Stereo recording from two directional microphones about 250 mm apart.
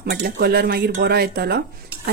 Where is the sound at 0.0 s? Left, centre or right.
Right.